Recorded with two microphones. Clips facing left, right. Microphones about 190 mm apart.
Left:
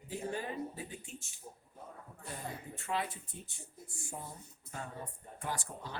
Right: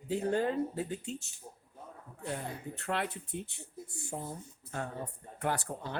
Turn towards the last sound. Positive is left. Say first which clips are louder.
# right 6 dB
turn(degrees=-60)  # may be behind; listen again after turning